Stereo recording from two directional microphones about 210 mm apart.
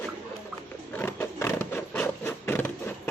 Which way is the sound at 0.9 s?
10° left (ahead or behind).